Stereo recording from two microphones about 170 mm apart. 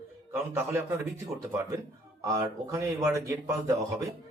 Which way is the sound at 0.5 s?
15° right (ahead or behind).